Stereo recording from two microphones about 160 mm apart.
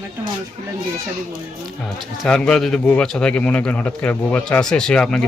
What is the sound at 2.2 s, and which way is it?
A man's voice, 5° left (ahead or behind).